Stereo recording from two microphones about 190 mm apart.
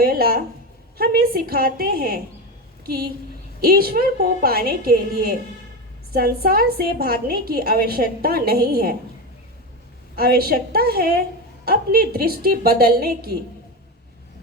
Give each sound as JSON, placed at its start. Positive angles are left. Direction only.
{"t": 0.0, "sound": "a woman's voice", "side_deg": -50}
{"t": 10.2, "sound": "a woman's voice", "side_deg": -55}